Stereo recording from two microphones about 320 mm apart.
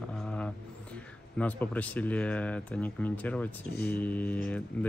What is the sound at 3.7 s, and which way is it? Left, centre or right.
Speech, left.